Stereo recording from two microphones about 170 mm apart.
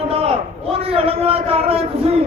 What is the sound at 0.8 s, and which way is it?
A man's voice, 35° right (ahead or behind).